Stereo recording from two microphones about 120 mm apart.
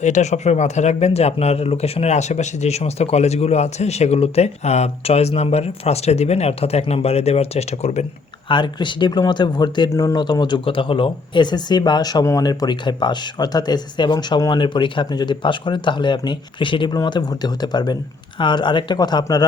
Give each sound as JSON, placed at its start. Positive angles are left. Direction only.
{"t": 0.0, "sound": "speech", "side_deg": 75}
{"t": 8.4, "sound": "speech", "side_deg": 40}